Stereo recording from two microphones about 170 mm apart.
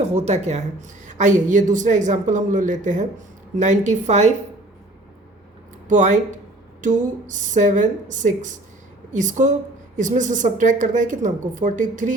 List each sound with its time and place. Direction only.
0.0 s a woman's voice: 40° right (ahead or behind)
5.9 s a woman's voice: 45° right (ahead or behind)